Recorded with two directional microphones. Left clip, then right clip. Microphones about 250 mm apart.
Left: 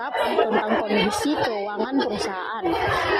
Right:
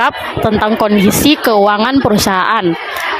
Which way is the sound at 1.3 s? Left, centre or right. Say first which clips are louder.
Right 15 dB; right.